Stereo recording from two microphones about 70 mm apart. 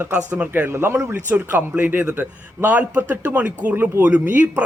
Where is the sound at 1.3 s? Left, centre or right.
Right.